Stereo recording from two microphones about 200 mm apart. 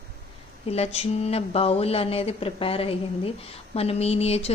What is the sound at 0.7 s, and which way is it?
Speech, 30° left (ahead or behind).